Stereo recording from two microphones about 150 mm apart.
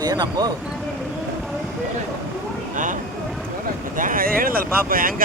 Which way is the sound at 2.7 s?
60° right (ahead or behind).